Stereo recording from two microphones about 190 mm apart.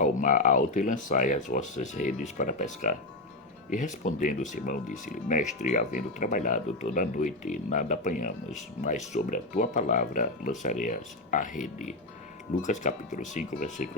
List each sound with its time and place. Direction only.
0.0 s speech: 45° left (ahead or behind)